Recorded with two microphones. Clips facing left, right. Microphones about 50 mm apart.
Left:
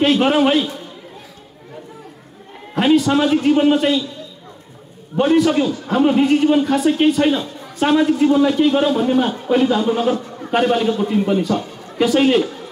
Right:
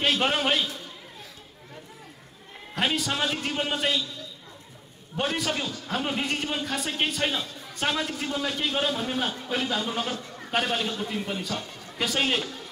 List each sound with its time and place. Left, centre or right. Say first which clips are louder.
0.2 s a man's voice: left 10 dB; centre
2.7 s a man's voice: left 13 dB; centre
5.1 s a man's voice: left 14 dB; centre